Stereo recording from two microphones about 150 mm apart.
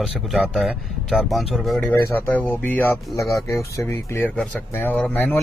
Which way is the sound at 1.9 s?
15° left (ahead or behind).